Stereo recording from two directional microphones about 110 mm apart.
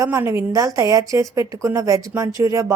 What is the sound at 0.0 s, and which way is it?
A woman's voice, 25° right (ahead or behind).